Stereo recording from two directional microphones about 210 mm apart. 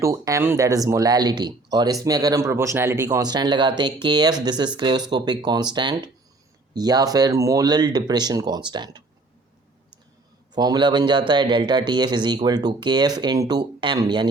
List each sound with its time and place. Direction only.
0.0 s speech: 15° right (ahead or behind)
10.5 s speech: 20° right (ahead or behind)